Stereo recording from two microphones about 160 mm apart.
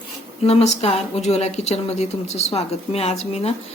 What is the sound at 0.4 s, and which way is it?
Speech, 40° left (ahead or behind).